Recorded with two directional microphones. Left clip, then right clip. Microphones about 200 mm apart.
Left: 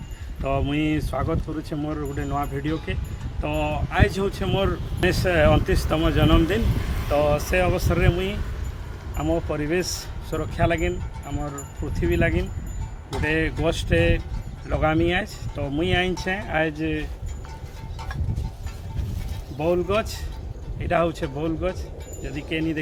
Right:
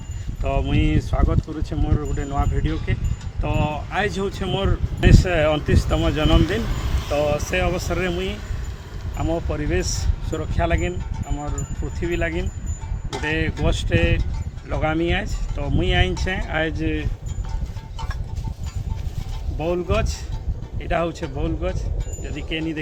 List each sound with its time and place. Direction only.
0.4 s speech: centre (ahead or behind)
6.8 s vehicle: 50° right (ahead or behind)
7.1 s speech: 5° left (ahead or behind)
19.5 s speech: 5° left (ahead or behind)